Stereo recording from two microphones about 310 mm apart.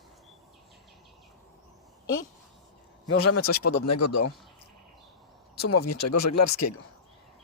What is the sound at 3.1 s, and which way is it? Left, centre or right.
Speech, left.